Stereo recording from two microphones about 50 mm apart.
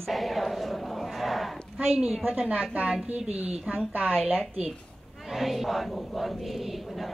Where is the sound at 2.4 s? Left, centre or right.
Right.